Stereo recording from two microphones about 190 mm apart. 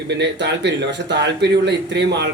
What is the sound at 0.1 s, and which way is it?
A man's voice, 65° right (ahead or behind).